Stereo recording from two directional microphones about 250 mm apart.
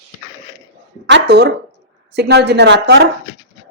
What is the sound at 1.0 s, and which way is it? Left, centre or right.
A woman's voice, right.